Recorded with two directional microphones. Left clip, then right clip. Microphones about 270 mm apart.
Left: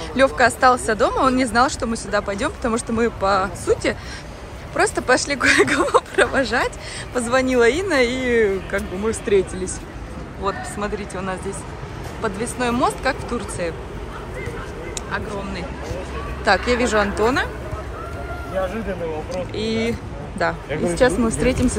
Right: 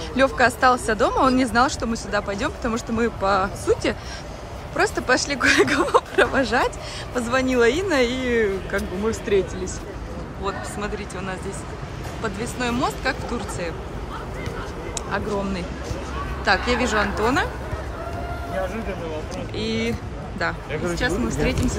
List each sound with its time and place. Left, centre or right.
0.1 s speech: centre
10.4 s speech: centre
15.0 s speech: centre
16.4 s speech: centre
19.5 s speech: centre